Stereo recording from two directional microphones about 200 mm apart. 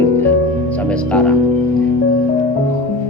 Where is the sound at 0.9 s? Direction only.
5° left (ahead or behind).